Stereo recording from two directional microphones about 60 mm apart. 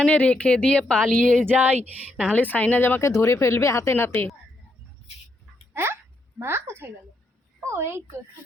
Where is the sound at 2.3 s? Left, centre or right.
Left.